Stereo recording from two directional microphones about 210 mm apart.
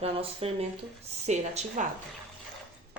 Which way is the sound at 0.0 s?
30° right (ahead or behind).